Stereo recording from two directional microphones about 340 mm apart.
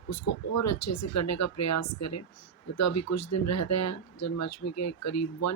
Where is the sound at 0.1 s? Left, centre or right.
Left.